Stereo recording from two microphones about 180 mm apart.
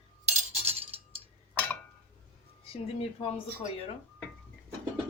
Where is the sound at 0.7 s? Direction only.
35° right (ahead or behind).